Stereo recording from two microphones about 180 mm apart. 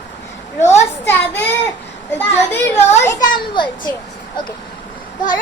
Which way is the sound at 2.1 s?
10° left (ahead or behind).